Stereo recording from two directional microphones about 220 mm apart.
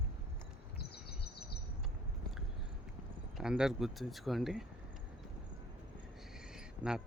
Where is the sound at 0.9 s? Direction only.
45° left (ahead or behind).